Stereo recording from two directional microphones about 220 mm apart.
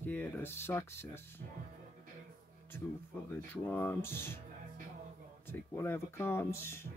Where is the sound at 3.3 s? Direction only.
10° left (ahead or behind).